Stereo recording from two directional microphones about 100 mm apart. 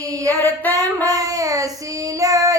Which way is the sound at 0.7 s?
35° right (ahead or behind).